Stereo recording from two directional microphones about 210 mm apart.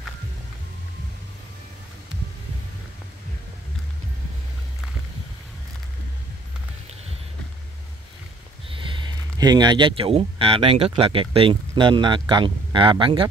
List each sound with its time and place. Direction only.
8.6 s speech: 25° right (ahead or behind)